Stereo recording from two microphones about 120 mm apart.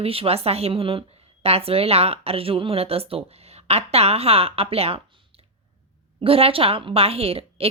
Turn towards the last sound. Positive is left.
turn(degrees=-55)  # may be behind; listen again after turning